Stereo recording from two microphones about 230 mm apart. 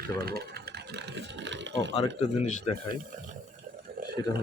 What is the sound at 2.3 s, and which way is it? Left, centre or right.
Speech, right.